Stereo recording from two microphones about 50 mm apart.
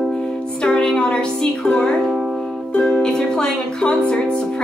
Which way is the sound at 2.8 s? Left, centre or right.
Centre.